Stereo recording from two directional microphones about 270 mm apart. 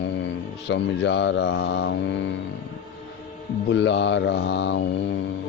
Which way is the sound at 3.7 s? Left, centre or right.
Left.